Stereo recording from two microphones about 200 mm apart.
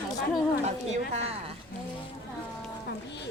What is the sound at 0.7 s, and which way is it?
Speech, 35° right (ahead or behind).